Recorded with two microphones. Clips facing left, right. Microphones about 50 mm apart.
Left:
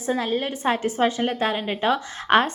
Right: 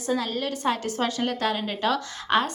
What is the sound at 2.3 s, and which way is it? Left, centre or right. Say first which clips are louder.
Speech: left 5 dB; left.